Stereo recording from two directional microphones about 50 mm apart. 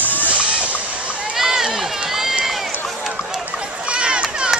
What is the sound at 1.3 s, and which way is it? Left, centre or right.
Run, centre.